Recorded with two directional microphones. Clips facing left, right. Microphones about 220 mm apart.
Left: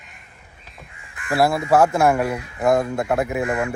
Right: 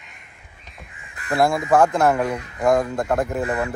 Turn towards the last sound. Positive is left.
turn(degrees=-35)  # may be behind; listen again after turning